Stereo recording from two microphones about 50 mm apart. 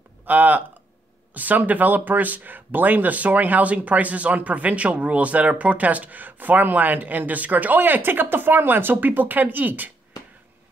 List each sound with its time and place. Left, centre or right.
0.2 s speech: right